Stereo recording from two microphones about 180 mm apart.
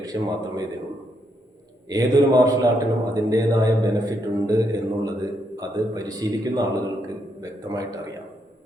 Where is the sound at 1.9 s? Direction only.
20° right (ahead or behind).